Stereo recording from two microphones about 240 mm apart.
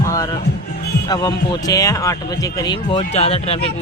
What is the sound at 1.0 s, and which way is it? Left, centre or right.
Speech, centre.